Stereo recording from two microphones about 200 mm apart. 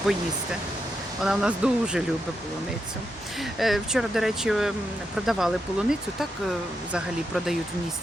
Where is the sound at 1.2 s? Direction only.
5° right (ahead or behind).